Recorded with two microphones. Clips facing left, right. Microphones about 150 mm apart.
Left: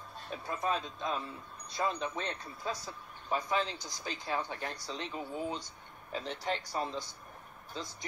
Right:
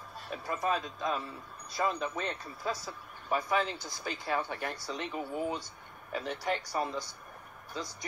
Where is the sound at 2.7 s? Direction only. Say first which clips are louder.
Right 2 dB; 20° left (ahead or behind).